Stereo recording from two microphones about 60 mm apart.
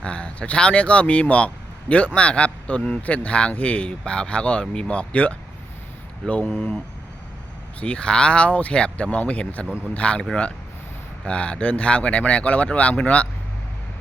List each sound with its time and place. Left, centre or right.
0.0 s speech: centre
7.8 s speech: left
9.6 s speech: right
9.9 s speech: left
11.3 s speech: centre